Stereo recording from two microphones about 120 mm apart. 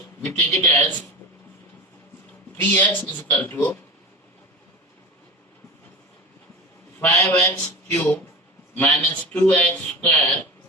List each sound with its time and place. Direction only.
0.3 s speech: 15° left (ahead or behind)
2.6 s speech: 15° left (ahead or behind)
7.0 s a man's voice: 20° left (ahead or behind)